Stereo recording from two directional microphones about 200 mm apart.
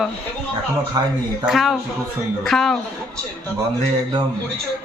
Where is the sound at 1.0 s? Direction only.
20° right (ahead or behind).